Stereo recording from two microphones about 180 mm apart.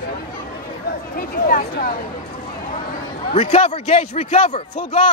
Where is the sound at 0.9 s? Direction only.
50° left (ahead or behind).